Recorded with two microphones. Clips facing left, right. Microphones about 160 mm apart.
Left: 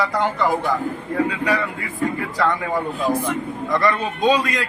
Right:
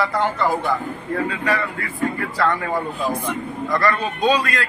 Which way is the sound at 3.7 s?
20° left (ahead or behind).